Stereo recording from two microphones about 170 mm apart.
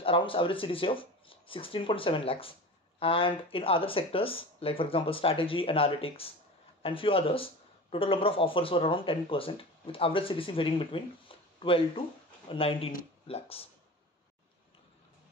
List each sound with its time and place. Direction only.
0.0 s speech: 30° left (ahead or behind)